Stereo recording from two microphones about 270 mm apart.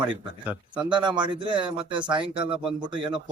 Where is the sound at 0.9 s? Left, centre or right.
Centre.